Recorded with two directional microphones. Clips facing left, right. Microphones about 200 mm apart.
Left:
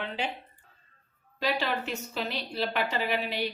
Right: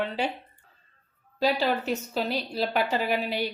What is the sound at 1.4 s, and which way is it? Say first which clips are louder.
A woman's voice: right 5 dB; 35° right (ahead or behind).